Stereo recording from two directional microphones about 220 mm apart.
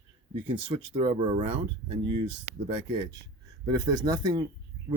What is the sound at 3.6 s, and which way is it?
Speech, 20° right (ahead or behind).